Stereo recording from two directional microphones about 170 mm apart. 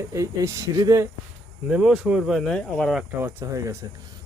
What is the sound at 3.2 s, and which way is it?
Speech, 15° right (ahead or behind).